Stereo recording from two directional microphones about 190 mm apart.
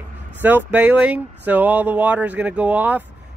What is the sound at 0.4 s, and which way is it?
Speech, 10° right (ahead or behind).